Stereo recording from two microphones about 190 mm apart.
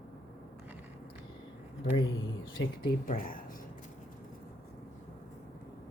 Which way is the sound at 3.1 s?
45° left (ahead or behind).